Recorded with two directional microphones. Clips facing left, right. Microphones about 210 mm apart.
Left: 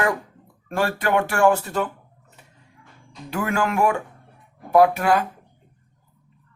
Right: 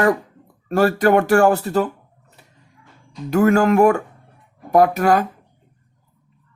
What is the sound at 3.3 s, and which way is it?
Speech, 40° right (ahead or behind).